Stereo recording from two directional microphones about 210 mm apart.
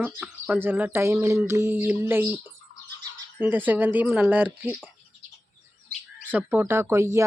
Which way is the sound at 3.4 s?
10° right (ahead or behind).